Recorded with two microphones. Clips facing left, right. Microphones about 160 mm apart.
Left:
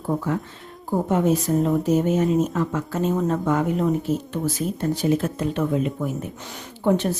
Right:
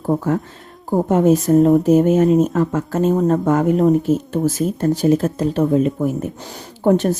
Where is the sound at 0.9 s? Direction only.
45° right (ahead or behind).